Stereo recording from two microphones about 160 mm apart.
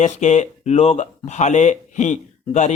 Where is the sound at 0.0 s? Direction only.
45° left (ahead or behind).